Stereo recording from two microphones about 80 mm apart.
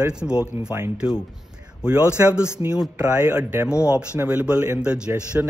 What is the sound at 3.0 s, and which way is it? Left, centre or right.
A man's voice, centre.